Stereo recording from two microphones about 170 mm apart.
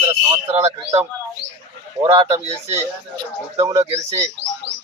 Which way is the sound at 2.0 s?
20° right (ahead or behind).